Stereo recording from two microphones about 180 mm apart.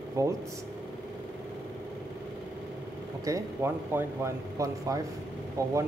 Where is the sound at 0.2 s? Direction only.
15° right (ahead or behind).